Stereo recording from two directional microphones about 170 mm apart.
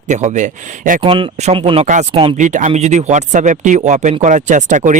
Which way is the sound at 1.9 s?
45° right (ahead or behind).